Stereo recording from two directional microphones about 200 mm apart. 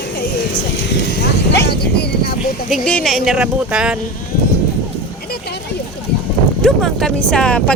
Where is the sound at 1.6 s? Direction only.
55° left (ahead or behind).